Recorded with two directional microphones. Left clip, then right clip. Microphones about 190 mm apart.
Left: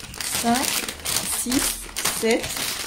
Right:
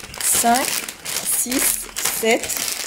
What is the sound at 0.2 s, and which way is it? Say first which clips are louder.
Crumpling: right 5 dB; 15° left (ahead or behind).